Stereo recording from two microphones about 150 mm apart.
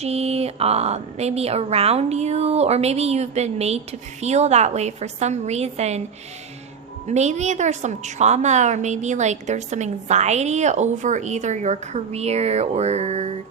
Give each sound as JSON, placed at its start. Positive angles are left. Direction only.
{"t": 0.0, "sound": "a woman's voice", "side_deg": -45}
{"t": 7.1, "sound": "a woman's voice", "side_deg": -50}